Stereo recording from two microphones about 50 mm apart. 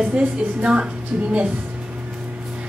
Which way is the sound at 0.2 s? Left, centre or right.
Right.